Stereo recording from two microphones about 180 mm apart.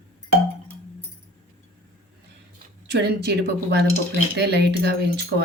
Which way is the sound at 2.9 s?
65° right (ahead or behind).